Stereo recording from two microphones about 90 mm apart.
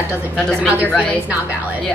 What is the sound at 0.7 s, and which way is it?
Speech, 15° right (ahead or behind).